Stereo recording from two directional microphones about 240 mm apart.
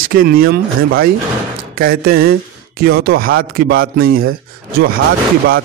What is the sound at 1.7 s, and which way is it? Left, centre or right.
Speech, right.